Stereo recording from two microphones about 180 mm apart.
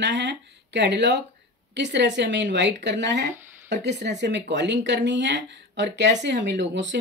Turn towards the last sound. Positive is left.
turn(degrees=-80)